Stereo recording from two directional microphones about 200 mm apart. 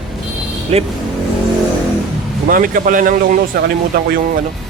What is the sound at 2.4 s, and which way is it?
Speech, 45° right (ahead or behind).